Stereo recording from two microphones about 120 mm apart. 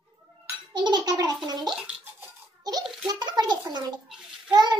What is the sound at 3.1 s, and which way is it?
A child's voice, 35° right (ahead or behind).